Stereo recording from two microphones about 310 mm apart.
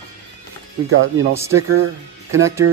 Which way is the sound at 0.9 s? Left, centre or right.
Right.